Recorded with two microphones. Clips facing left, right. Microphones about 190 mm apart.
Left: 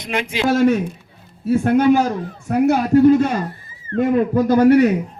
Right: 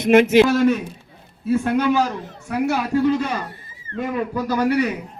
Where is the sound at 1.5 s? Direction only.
50° left (ahead or behind).